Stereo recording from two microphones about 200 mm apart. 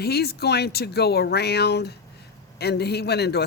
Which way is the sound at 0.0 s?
55° left (ahead or behind).